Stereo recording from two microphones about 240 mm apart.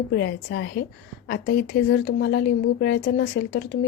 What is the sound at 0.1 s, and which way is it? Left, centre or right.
Speech, left.